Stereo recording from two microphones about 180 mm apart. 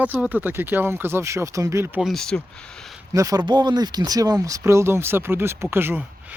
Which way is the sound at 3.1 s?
20° right (ahead or behind).